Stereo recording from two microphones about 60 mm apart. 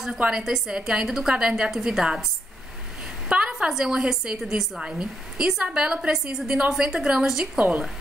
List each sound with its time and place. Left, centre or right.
0.3 s a woman's voice: centre
3.3 s a sound: centre
3.5 s a woman's voice: centre